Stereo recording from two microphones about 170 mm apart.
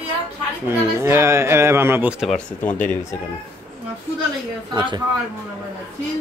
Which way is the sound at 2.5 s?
10° left (ahead or behind).